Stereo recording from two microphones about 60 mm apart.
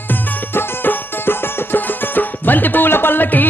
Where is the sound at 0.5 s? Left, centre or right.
Left.